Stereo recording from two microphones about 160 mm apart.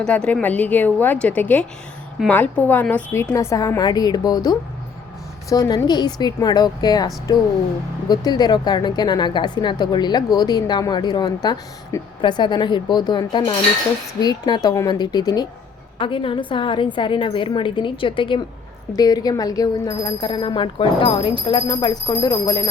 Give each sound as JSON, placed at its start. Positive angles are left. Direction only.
{"t": 0.0, "sound": "a woman's voice", "side_deg": 5}